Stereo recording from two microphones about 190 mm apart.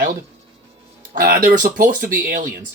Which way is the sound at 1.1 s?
55° right (ahead or behind).